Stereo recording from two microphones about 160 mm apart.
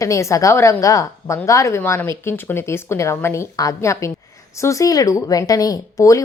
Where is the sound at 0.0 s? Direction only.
20° left (ahead or behind).